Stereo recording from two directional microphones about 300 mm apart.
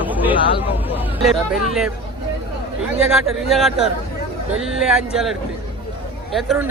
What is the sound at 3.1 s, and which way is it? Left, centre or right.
Speech, centre.